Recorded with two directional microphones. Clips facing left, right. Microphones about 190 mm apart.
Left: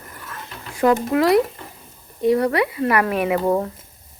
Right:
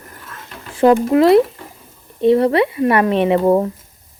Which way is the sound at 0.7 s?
25° right (ahead or behind).